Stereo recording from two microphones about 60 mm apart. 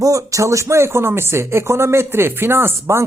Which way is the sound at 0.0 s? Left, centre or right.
Right.